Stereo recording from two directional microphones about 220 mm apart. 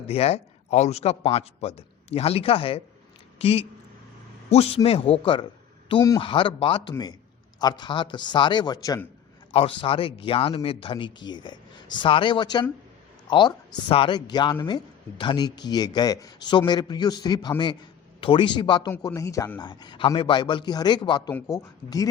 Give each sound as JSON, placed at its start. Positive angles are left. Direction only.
{"t": 0.1, "sound": "speech", "side_deg": 30}